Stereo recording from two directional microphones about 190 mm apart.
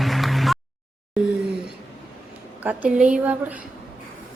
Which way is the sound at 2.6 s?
10° right (ahead or behind).